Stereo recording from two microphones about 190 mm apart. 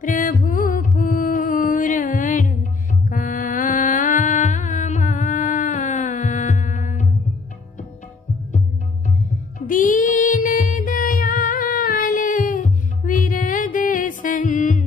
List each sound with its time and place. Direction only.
0.0 s music: 45° left (ahead or behind)
9.7 s music: 45° left (ahead or behind)